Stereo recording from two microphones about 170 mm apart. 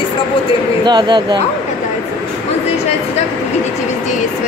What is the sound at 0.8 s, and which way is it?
Speech, 25° right (ahead or behind).